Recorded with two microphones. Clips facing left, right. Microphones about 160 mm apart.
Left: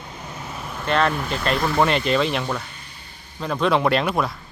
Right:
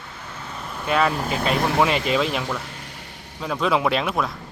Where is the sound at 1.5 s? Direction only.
65° right (ahead or behind).